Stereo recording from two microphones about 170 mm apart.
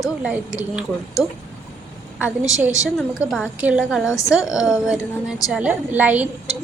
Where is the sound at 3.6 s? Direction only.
5° right (ahead or behind).